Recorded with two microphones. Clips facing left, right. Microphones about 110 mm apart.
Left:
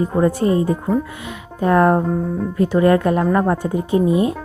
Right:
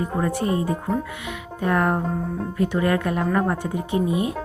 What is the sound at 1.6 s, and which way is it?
Speech, 35° left (ahead or behind).